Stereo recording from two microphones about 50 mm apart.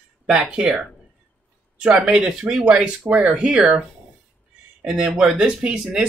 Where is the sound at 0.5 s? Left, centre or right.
Centre.